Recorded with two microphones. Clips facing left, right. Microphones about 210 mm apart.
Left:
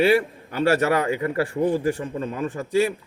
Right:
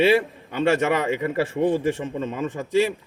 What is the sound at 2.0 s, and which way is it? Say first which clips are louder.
Speech: even; 20° right (ahead or behind).